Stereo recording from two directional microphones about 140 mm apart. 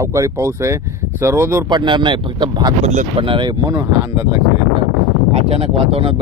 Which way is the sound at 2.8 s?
60° right (ahead or behind).